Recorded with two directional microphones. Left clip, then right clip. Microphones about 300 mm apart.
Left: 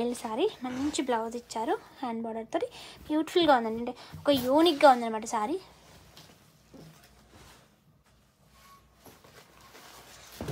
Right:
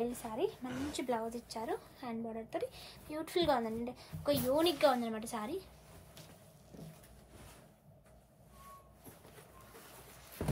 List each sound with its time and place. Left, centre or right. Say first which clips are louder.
0.0 s speech: left 7 dB; left